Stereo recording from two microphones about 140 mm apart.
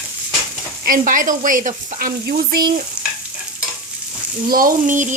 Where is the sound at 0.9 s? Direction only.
70° right (ahead or behind).